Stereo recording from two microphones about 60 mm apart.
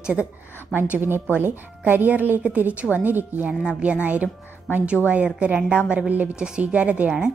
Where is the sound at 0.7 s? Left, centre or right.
Right.